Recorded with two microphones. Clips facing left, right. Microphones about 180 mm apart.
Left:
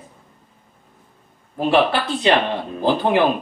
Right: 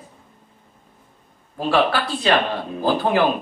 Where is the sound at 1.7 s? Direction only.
20° left (ahead or behind).